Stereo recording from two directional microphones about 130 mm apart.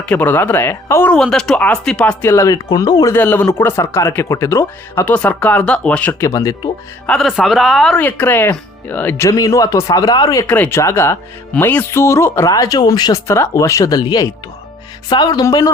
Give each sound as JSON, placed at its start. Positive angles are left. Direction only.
{"t": 0.0, "sound": "speech", "side_deg": 15}
{"t": 1.1, "sound": "speech", "side_deg": 5}
{"t": 2.2, "sound": "speech", "side_deg": 25}
{"t": 3.2, "sound": "speech", "side_deg": 15}
{"t": 6.2, "sound": "speech", "side_deg": 25}
{"t": 7.1, "sound": "speech", "side_deg": 0}
{"t": 8.0, "sound": "speech", "side_deg": 15}
{"t": 10.4, "sound": "speech", "side_deg": 15}